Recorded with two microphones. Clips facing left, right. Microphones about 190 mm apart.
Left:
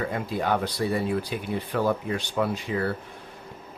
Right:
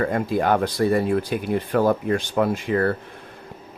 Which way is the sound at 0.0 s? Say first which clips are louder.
Right 6 dB; 50° right (ahead or behind).